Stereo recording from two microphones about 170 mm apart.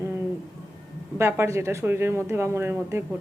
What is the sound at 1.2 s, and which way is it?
Speech, 15° right (ahead or behind).